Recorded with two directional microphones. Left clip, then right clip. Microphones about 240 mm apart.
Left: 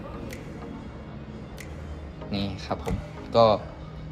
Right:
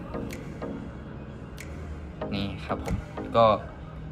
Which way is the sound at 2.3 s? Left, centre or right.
Centre.